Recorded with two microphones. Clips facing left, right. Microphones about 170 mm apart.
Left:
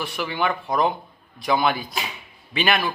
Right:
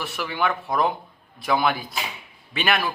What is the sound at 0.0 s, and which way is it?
A man's voice, centre (ahead or behind).